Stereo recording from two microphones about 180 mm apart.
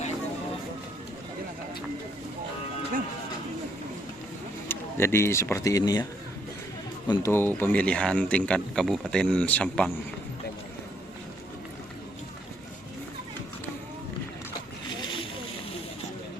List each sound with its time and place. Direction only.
4.7 s speech: 15° left (ahead or behind)
7.1 s speech: 15° left (ahead or behind)
14.8 s boat: 25° left (ahead or behind)